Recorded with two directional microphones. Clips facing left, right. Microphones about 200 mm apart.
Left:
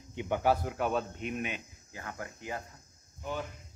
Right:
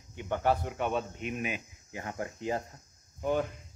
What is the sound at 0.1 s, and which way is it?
Speech, 15° left (ahead or behind).